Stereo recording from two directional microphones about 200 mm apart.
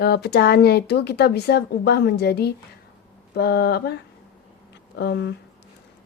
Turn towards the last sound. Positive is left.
turn(degrees=55)  # may be behind; listen again after turning